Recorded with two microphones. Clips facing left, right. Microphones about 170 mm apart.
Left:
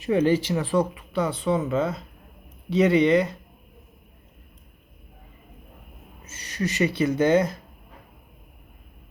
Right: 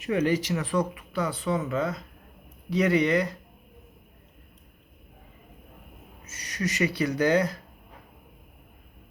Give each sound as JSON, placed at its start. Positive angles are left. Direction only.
{"t": 0.0, "sound": "speech", "side_deg": 30}
{"t": 6.2, "sound": "speech", "side_deg": 30}